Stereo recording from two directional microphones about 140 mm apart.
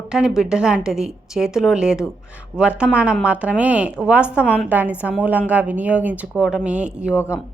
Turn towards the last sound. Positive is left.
turn(degrees=20)  # may be behind; listen again after turning